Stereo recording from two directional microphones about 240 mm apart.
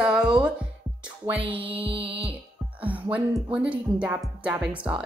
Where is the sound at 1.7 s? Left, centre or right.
Right.